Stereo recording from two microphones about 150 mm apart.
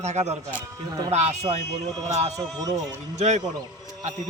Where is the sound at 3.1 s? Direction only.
50° right (ahead or behind).